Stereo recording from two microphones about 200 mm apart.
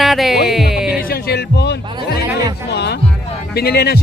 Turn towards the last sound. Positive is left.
turn(degrees=50)  # may be behind; listen again after turning